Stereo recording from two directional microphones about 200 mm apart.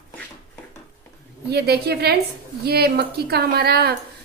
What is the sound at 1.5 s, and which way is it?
A woman's voice, 55° right (ahead or behind).